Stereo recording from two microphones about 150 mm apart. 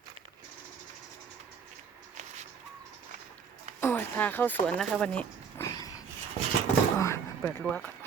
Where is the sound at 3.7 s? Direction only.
15° left (ahead or behind).